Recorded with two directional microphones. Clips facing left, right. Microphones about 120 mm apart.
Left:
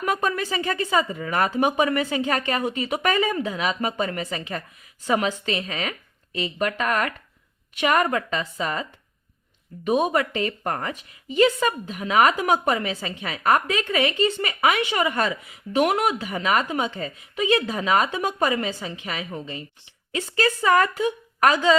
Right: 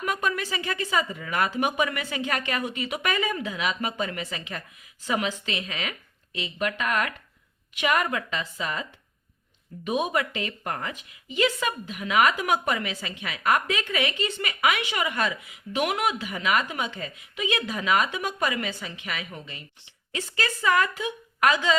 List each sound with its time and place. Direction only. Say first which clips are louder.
0.0 s a woman's voice: left 3 dB; 35° left (ahead or behind)